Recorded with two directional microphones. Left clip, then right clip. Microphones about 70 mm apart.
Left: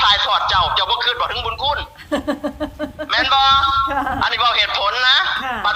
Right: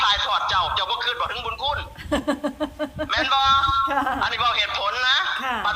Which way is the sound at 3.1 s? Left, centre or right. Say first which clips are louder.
Left 5 dB; left.